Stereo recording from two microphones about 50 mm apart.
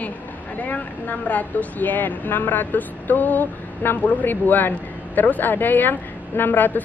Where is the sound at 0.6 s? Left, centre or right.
Left.